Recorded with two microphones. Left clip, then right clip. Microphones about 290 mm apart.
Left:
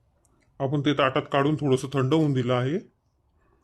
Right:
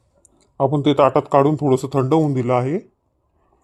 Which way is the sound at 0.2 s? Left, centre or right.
Right.